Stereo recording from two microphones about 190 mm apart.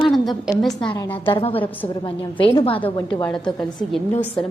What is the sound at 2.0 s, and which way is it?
Speech, 25° left (ahead or behind).